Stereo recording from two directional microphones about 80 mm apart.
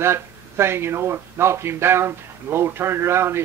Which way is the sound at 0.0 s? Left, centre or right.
Right.